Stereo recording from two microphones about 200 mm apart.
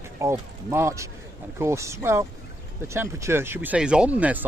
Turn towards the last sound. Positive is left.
turn(degrees=-5)  # may be behind; listen again after turning